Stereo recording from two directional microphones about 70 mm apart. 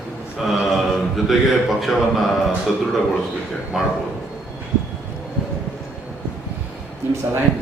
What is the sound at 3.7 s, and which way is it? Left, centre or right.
Speech, centre.